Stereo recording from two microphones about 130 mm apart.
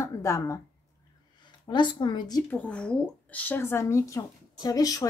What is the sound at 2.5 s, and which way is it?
Speech, 10° left (ahead or behind).